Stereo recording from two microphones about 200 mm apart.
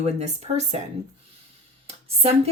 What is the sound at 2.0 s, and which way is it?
Speech, 30° right (ahead or behind).